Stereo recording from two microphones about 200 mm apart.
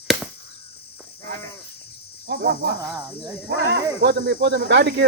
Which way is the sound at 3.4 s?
60° right (ahead or behind).